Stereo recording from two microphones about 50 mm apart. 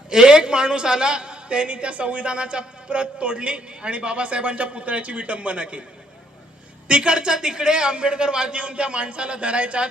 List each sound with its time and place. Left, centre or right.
0.1 s a man's voice: centre
6.8 s a man's voice: right